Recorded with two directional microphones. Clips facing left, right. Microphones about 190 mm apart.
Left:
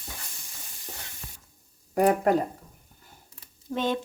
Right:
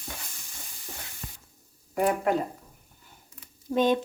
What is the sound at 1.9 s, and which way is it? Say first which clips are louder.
Speech: left 3 dB; 40° left (ahead or behind).